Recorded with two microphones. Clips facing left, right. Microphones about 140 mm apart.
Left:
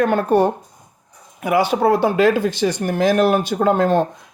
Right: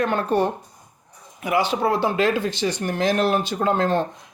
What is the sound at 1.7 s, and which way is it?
Speech, 50° left (ahead or behind).